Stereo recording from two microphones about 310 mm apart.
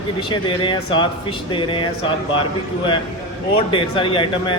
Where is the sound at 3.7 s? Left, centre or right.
Centre.